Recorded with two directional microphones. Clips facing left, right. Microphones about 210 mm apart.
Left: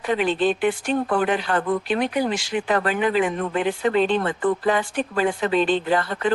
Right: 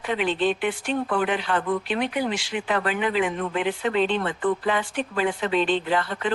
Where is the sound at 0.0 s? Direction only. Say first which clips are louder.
Left 3 dB; 40° left (ahead or behind).